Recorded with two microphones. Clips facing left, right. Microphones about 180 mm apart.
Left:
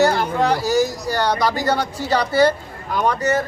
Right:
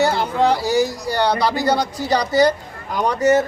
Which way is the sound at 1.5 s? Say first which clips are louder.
Right 1 dB; 10° right (ahead or behind).